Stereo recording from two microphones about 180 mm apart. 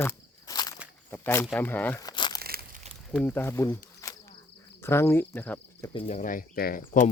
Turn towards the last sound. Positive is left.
turn(degrees=45)  # may be behind; listen again after turning